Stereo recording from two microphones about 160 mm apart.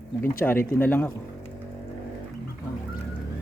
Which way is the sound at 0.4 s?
15° left (ahead or behind).